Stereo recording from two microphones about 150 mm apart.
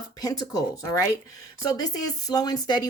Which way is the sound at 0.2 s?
25° left (ahead or behind).